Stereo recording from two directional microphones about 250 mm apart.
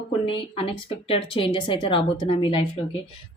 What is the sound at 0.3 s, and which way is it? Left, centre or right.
Speech, left.